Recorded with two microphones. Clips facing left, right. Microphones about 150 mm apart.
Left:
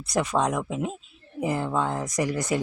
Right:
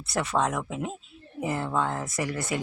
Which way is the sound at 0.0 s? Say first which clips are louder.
Left 2 dB; 15° left (ahead or behind).